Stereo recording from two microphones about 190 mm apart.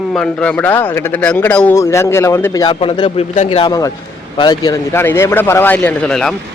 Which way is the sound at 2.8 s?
30° left (ahead or behind).